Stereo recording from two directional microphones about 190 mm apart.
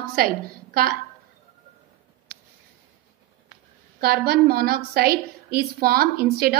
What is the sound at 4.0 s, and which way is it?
A woman's voice, 55° right (ahead or behind).